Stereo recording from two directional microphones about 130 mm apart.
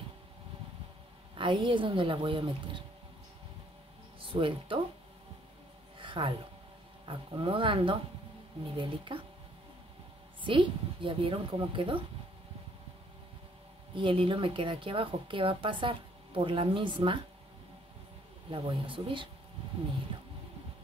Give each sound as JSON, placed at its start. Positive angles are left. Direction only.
{"t": 1.3, "sound": "a woman's voice", "side_deg": -40}
{"t": 4.2, "sound": "speech", "side_deg": -40}
{"t": 5.9, "sound": "a sound", "side_deg": -40}
{"t": 7.1, "sound": "a woman's voice", "side_deg": -40}
{"t": 10.4, "sound": "a woman's voice", "side_deg": -40}
{"t": 13.9, "sound": "a woman's voice", "side_deg": -40}
{"t": 18.5, "sound": "a woman's voice", "side_deg": -40}